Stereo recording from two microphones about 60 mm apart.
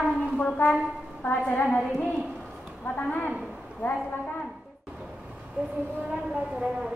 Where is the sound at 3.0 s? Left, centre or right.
Left.